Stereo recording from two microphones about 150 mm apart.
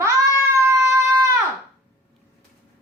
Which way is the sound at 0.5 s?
20° right (ahead or behind).